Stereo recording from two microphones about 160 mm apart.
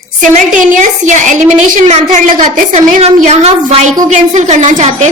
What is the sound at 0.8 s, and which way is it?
A woman's voice, 50° right (ahead or behind).